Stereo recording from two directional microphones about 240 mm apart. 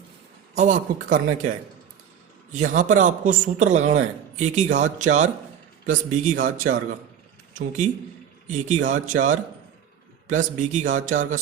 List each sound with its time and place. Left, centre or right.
0.5 s a man's voice: right